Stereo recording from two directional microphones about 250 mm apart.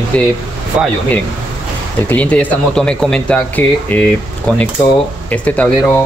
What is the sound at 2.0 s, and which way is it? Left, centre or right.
Speech, centre.